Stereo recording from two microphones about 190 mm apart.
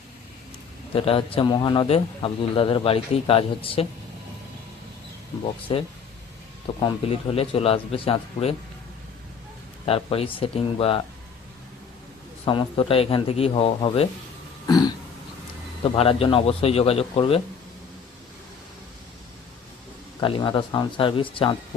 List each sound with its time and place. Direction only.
0.9 s a man's voice: 30° left (ahead or behind)
5.7 s a man's voice: 30° left (ahead or behind)
9.8 s a man's voice: 30° left (ahead or behind)
12.5 s a man's voice: 25° left (ahead or behind)
14.7 s throat clearing: 20° left (ahead or behind)
15.8 s speech: 30° left (ahead or behind)
20.2 s a man's voice: 25° left (ahead or behind)